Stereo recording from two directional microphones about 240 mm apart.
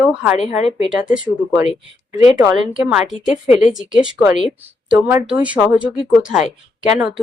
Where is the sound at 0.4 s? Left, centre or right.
Left.